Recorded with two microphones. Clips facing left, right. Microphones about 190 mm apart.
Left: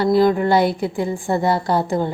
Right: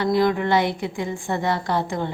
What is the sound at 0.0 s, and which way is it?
A woman's voice, 35° left (ahead or behind).